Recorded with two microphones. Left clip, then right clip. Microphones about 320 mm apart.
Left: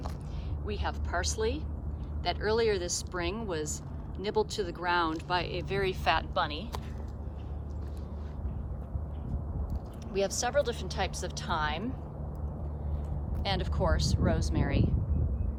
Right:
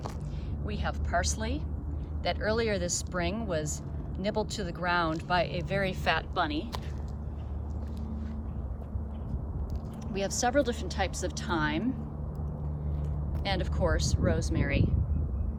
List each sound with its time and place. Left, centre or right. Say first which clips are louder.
0.6 s speech: even; centre
10.1 s speech: right 1 dB; centre
13.4 s speech: right 1 dB; centre